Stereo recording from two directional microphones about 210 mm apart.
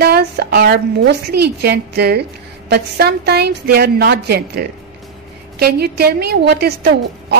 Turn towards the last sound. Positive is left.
turn(degrees=-50)  # may be behind; listen again after turning